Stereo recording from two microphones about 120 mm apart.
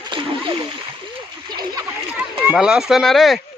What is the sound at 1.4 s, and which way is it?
Splash, 40° right (ahead or behind).